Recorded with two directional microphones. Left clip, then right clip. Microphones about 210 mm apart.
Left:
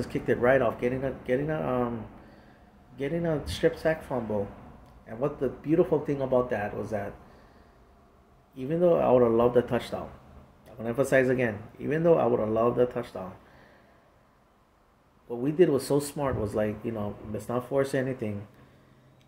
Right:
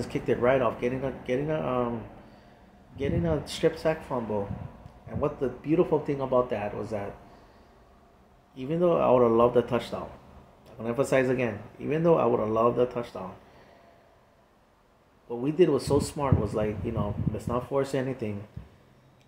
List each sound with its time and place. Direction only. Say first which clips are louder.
0.1 s speech: left 1 dB; 5° left (ahead or behind)
3.0 s speech: even; 5° left (ahead or behind)
8.5 s speech: left 1 dB; 5° left (ahead or behind)
15.2 s speech: even; 5° left (ahead or behind)